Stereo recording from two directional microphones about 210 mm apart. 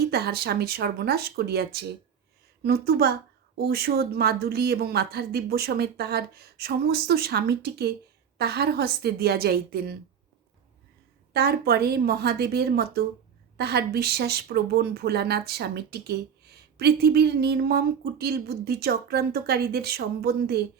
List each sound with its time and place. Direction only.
0.1 s speech: 50° right (ahead or behind)
11.3 s speech: 50° right (ahead or behind)